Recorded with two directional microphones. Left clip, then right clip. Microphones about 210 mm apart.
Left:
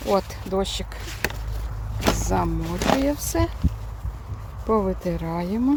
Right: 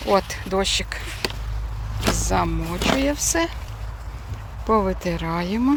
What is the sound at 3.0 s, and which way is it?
Speech, 15° left (ahead or behind).